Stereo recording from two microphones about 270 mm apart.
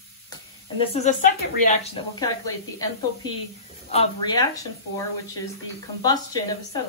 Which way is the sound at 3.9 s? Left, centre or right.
Centre.